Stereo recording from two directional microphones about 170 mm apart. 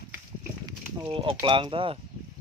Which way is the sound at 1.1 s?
30° right (ahead or behind).